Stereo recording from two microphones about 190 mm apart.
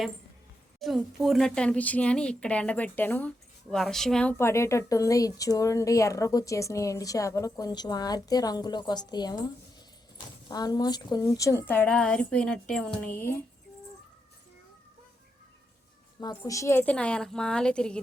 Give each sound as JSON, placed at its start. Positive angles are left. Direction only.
{"t": 0.8, "sound": "speech", "side_deg": 0}
{"t": 10.5, "sound": "speech", "side_deg": 20}
{"t": 16.4, "sound": "a woman's voice", "side_deg": 15}